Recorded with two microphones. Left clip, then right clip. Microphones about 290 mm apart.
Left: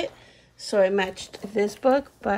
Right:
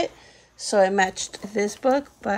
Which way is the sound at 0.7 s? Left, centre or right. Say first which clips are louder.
Right 2 dB; centre.